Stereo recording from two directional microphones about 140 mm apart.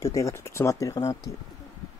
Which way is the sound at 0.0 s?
20° left (ahead or behind).